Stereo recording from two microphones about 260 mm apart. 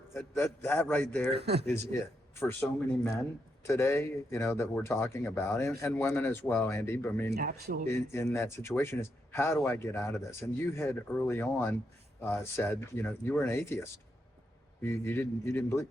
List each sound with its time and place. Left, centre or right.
0.1 s speech: centre
1.4 s speech: right
1.6 s speech: centre
7.3 s speech: right
8.1 s speech: centre